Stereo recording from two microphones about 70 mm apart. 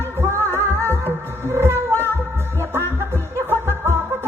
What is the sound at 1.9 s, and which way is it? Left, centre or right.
Music, left.